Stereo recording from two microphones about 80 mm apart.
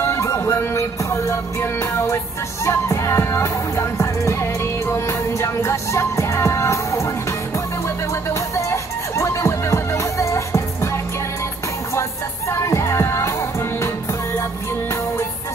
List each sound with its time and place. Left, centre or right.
0.0 s music: left
8.1 s music: left
11.9 s music: left